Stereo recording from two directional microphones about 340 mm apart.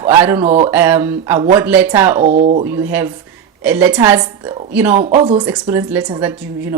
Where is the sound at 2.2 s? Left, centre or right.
Right.